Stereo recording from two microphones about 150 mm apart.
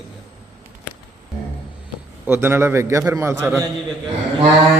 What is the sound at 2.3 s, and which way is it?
A man's voice, 15° right (ahead or behind).